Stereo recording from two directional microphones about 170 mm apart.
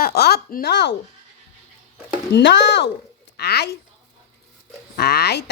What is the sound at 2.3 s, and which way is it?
Speech, 90° left.